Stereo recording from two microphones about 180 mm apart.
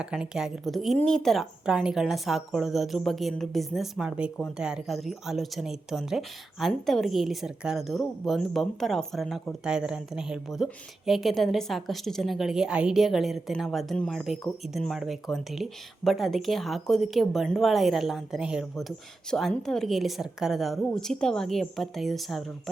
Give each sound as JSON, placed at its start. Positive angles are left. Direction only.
{"t": 0.0, "sound": "a woman's voice", "side_deg": -5}